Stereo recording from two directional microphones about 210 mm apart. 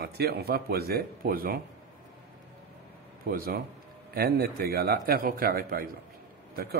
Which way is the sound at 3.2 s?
45° right (ahead or behind).